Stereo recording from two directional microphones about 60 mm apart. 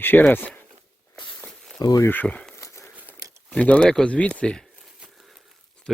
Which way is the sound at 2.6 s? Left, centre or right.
Left.